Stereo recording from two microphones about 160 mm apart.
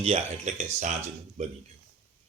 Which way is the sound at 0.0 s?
40° right (ahead or behind).